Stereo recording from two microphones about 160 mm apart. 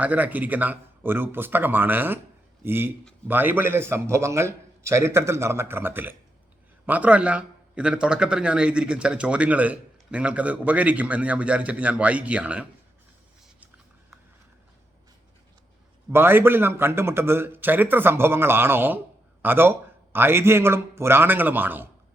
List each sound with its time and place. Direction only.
0.0 s a man's voice: 10° right (ahead or behind)
16.1 s a man's voice: 15° right (ahead or behind)